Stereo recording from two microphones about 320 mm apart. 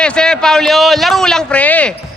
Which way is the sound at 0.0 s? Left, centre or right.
Centre.